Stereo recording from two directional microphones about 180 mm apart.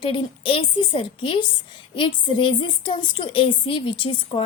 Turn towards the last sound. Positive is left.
turn(degrees=30)  # may be behind; listen again after turning